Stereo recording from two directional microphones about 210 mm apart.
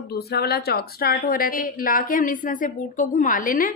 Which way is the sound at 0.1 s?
50° left (ahead or behind).